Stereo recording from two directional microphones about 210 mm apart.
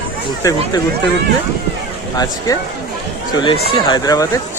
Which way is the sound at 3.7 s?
20° left (ahead or behind).